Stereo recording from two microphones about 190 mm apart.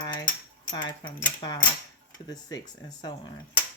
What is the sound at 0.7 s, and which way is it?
Speech, 25° left (ahead or behind).